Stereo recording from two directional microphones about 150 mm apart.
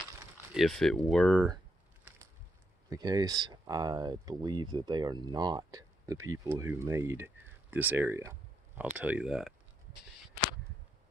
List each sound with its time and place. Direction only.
0.6 s speech: centre (ahead or behind)
2.1 s a sound: 10° right (ahead or behind)
2.9 s speech: 25° right (ahead or behind); by 9.5 s 5° right (ahead or behind)